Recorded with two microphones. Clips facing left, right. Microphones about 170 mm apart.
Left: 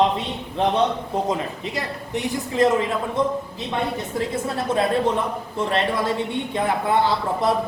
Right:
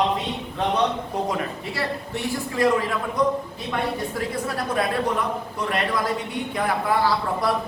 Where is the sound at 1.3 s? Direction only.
20° left (ahead or behind).